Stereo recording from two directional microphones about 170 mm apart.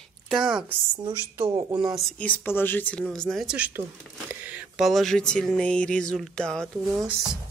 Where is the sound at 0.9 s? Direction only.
20° right (ahead or behind).